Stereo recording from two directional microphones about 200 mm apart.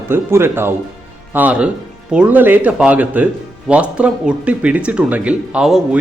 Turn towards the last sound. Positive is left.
turn(degrees=-5)  # may be behind; listen again after turning